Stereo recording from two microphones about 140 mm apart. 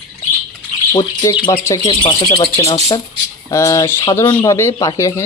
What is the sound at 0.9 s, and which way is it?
Speech, 25° left (ahead or behind).